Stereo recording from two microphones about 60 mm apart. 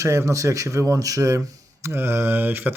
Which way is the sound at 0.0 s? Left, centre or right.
Right.